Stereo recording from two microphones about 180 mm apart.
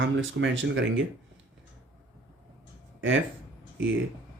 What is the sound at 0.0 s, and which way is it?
Speech, 90° right.